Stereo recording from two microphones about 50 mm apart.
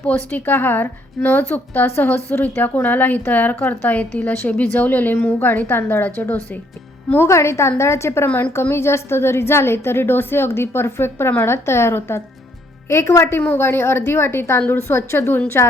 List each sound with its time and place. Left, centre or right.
0.1 s a woman's voice: left
7.3 s a woman's voice: left
12.9 s a woman's voice: left